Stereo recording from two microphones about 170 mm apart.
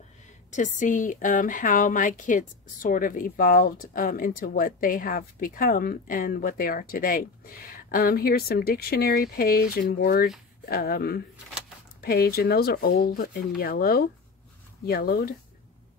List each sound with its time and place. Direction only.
0.5 s a woman's voice: 45° left (ahead or behind); by 15.3 s 65° left (ahead or behind)